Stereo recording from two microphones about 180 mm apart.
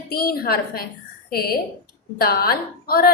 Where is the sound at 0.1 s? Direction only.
55° left (ahead or behind).